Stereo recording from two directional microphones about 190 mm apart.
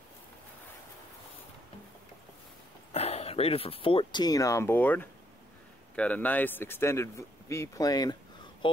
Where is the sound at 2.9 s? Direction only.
35° left (ahead or behind).